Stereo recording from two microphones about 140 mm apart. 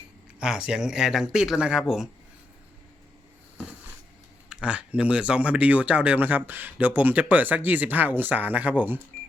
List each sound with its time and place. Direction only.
0.3 s speech: 5° right (ahead or behind)
4.4 s speech: 5° right (ahead or behind)